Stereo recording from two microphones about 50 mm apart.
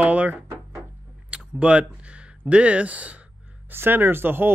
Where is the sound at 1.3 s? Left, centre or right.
Right.